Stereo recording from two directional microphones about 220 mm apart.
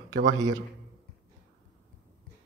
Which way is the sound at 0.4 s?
15° right (ahead or behind).